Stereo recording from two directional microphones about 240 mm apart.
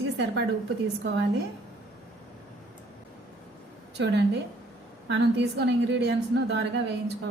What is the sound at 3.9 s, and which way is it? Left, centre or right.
A woman's voice, right.